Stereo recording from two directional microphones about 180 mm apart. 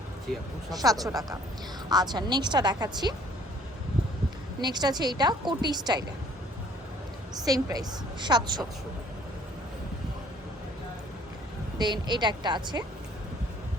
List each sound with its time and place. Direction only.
0.7 s a woman's voice: 20° right (ahead or behind)
4.6 s a woman's voice: 25° right (ahead or behind)
7.4 s a woman's voice: 20° right (ahead or behind)
11.8 s a woman's voice: 25° right (ahead or behind)